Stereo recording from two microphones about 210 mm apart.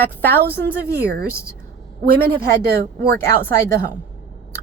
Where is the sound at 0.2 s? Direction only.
10° left (ahead or behind).